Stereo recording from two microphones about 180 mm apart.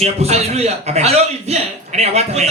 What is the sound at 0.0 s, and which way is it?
Speech, 35° right (ahead or behind).